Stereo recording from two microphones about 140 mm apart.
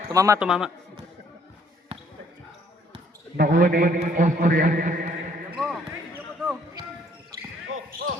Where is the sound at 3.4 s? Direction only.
90° right.